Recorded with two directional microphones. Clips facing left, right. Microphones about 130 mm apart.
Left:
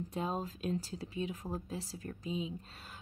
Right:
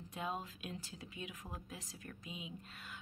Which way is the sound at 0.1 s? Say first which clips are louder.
Left 3 dB; 35° left (ahead or behind).